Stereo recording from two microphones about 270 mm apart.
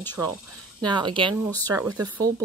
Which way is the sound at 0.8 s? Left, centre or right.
Centre.